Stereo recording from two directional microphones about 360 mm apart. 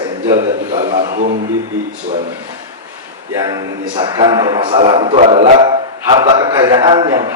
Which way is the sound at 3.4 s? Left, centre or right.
Centre.